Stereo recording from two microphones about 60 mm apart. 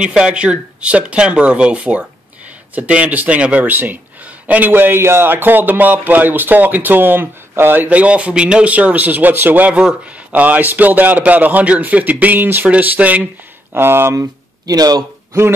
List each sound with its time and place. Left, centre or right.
0.0 s a man's voice: centre
13.7 s speech: right
14.1 s speech: right